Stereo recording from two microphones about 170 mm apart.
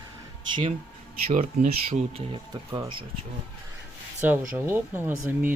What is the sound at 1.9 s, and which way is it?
Speech, 35° right (ahead or behind).